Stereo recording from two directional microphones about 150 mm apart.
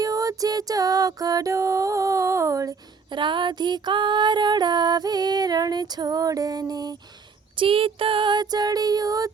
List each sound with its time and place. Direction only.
0.0 s music: 25° right (ahead or behind)
7.5 s music: 35° right (ahead or behind)